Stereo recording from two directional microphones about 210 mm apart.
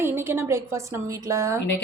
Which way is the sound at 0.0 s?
10° right (ahead or behind).